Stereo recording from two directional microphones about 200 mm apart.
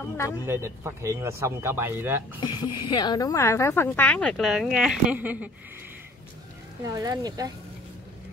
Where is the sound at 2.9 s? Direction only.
20° left (ahead or behind); by 5.5 s 10° right (ahead or behind).